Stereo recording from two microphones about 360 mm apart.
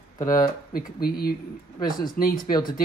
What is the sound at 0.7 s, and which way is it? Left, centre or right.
A woman's voice, left.